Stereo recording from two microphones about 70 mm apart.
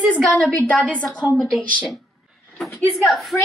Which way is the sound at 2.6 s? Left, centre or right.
Centre.